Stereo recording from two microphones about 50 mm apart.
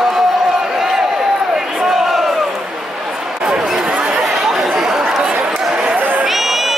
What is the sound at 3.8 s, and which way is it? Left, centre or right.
Chatter, right.